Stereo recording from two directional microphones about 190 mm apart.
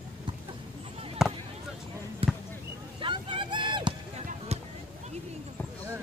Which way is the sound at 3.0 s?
25° right (ahead or behind).